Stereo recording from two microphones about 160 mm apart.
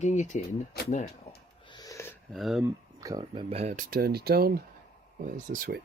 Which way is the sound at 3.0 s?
20° right (ahead or behind).